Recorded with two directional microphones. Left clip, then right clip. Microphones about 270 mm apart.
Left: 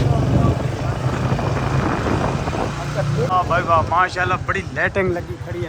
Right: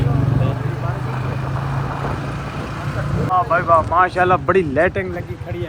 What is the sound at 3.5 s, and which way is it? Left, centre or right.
Speech, centre.